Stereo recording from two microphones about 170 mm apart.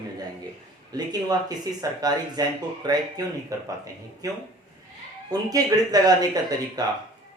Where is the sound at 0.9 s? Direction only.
25° right (ahead or behind).